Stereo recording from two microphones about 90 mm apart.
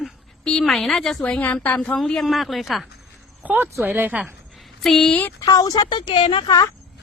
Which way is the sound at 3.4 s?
20° right (ahead or behind).